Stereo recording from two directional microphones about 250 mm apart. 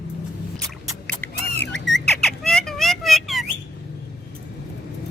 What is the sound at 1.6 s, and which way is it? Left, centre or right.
Squawk, left.